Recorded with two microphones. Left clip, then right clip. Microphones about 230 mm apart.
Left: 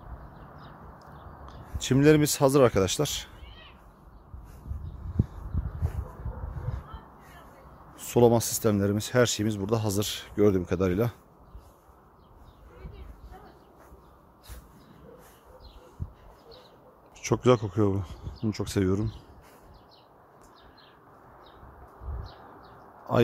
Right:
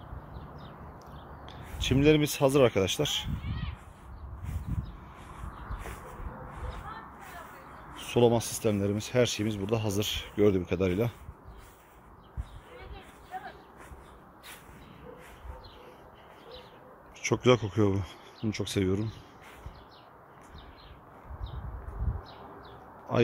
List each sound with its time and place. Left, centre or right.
1.8 s speech: left
8.0 s speech: left
17.2 s speech: centre
23.1 s a sound: centre